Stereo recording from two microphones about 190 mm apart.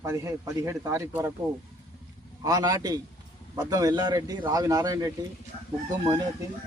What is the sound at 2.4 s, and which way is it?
A man's voice, 20° right (ahead or behind).